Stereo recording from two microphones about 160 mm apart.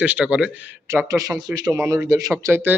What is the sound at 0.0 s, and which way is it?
Speech, 10° right (ahead or behind).